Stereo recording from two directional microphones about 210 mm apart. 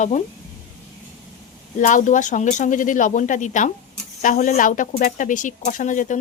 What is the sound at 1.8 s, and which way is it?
Speech, 40° left (ahead or behind).